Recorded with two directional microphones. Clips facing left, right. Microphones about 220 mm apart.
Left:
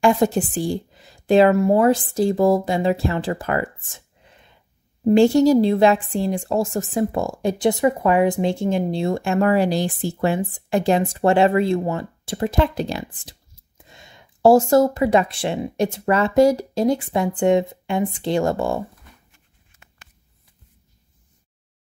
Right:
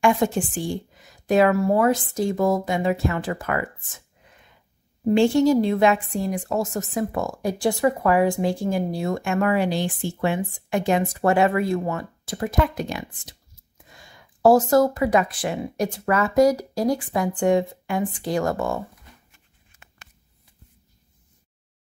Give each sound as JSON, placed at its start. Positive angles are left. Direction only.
{"t": 0.0, "sound": "speech", "side_deg": 35}